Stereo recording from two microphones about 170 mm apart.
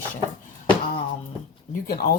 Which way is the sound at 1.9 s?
60° left (ahead or behind).